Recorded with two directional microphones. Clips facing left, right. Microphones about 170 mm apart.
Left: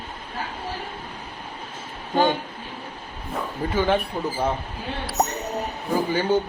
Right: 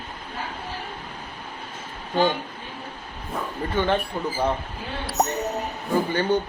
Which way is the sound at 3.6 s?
5° left (ahead or behind).